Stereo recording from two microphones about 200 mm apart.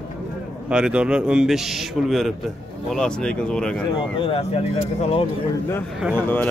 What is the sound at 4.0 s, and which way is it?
Speech, 25° left (ahead or behind).